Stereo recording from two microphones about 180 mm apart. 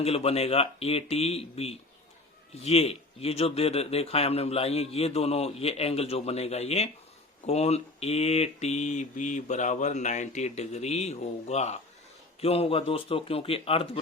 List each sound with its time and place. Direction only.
0.0 s speech: 35° left (ahead or behind)